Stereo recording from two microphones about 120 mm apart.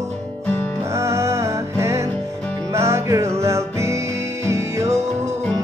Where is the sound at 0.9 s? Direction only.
25° right (ahead or behind).